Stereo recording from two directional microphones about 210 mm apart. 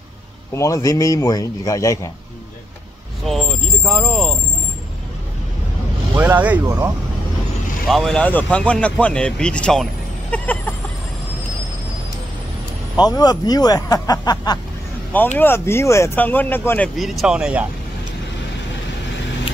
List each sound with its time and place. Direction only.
0.6 s speech: 15° left (ahead or behind)
3.3 s speech: centre (ahead or behind)
6.1 s speech: 10° right (ahead or behind)
7.9 s speech: centre (ahead or behind)
12.9 s speech: 20° left (ahead or behind); by 17.6 s 5° right (ahead or behind)